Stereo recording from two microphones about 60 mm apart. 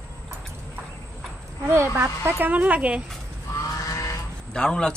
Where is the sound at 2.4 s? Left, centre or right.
Right.